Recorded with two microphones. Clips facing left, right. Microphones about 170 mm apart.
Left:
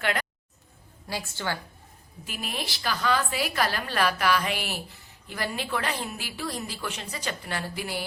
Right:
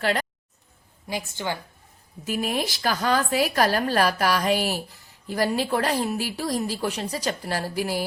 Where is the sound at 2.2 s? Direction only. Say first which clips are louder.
Right 9 dB; 45° right (ahead or behind).